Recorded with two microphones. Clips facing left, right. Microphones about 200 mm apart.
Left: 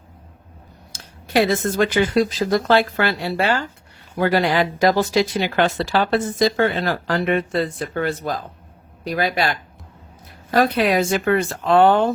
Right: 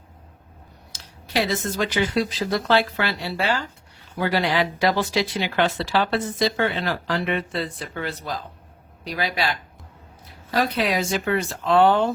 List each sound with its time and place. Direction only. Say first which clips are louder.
0.9 s speech: left 6 dB; 50° left (ahead or behind)